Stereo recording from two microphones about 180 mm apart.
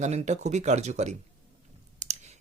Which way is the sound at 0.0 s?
40° right (ahead or behind).